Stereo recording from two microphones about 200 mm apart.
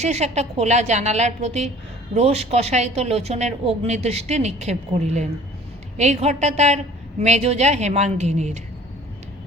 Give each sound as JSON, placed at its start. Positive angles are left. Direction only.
{"t": 0.0, "sound": "speech", "side_deg": -35}